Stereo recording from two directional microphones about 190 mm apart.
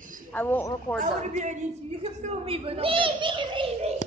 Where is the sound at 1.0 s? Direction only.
40° right (ahead or behind).